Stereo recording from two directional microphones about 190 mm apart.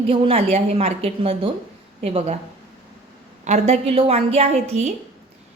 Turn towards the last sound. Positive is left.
turn(degrees=-35)  # may be behind; listen again after turning